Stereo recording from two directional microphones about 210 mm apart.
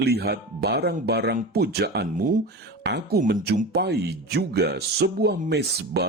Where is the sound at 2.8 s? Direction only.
50° right (ahead or behind).